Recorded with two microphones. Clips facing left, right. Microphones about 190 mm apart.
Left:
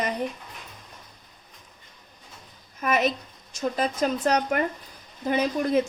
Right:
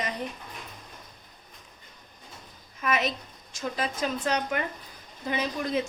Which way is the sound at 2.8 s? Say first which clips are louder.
Left 4 dB; 45° left (ahead or behind).